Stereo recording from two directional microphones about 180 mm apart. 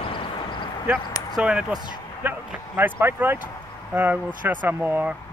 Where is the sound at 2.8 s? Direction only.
10° right (ahead or behind).